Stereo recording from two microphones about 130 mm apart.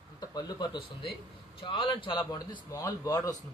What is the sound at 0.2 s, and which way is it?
A man's voice, 30° left (ahead or behind).